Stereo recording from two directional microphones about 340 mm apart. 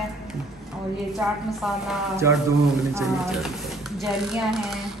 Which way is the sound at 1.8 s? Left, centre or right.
Centre.